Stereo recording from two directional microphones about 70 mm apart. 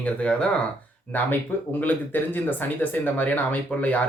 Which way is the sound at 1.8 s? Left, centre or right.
Left.